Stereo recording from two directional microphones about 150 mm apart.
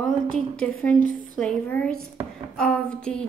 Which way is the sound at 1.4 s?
10° left (ahead or behind).